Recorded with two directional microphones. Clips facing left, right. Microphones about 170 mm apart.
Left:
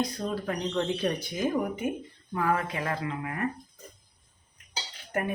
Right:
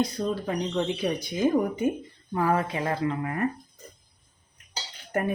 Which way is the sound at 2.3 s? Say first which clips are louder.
Right 3 dB; 30° right (ahead or behind).